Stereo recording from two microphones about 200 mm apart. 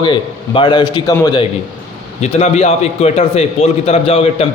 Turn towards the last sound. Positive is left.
turn(degrees=30)  # may be behind; listen again after turning